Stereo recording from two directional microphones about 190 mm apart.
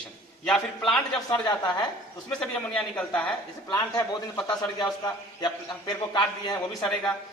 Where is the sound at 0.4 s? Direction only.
Centre (ahead or behind).